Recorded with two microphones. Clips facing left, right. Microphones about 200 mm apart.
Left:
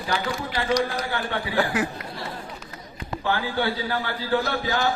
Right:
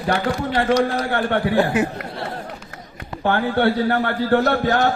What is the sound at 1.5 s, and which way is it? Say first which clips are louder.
Speech: right 4 dB; 25° right (ahead or behind).